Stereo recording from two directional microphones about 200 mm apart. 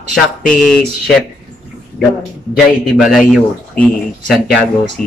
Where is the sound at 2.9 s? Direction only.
Centre (ahead or behind).